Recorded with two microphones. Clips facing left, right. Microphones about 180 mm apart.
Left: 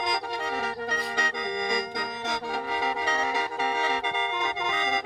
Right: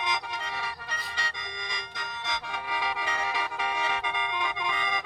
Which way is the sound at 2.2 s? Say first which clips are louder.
Left 3 dB; 40° left (ahead or behind).